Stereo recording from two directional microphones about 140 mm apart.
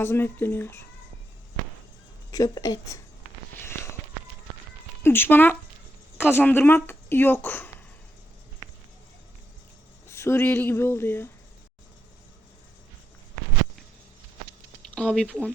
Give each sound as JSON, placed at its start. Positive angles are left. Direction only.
{"t": 0.0, "sound": "speech", "side_deg": 15}
{"t": 2.3, "sound": "a woman's voice", "side_deg": 25}
{"t": 3.5, "sound": "a sound", "side_deg": 15}
{"t": 5.0, "sound": "speech", "side_deg": 15}
{"t": 10.1, "sound": "speech", "side_deg": 20}
{"t": 14.9, "sound": "speech", "side_deg": 5}